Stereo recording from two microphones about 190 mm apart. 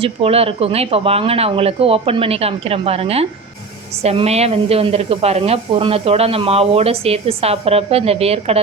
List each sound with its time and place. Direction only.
0.0 s speech: 30° right (ahead or behind)